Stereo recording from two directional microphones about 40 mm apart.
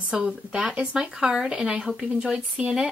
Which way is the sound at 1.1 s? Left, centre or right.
Centre.